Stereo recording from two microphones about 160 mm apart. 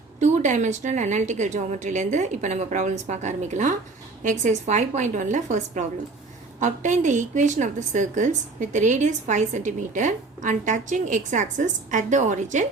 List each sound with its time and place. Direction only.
0.2 s a woman's voice: 50° right (ahead or behind)